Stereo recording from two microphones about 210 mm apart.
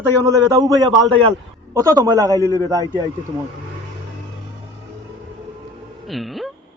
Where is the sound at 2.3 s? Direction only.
15° left (ahead or behind).